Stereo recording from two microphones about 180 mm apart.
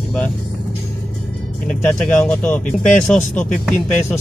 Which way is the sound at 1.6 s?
5° left (ahead or behind).